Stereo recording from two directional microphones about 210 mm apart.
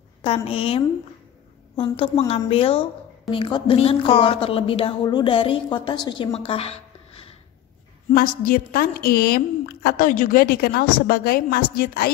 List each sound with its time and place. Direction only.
0.2 s a woman's voice: 25° left (ahead or behind)
2.0 s a woman's voice: 25° left (ahead or behind)
8.1 s a woman's voice: 40° left (ahead or behind)